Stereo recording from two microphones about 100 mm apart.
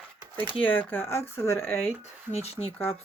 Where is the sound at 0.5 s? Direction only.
15° left (ahead or behind).